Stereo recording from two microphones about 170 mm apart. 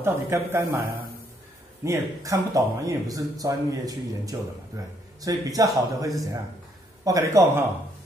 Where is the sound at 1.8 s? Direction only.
20° right (ahead or behind).